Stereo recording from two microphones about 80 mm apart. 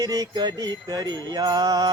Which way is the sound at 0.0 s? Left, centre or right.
Right.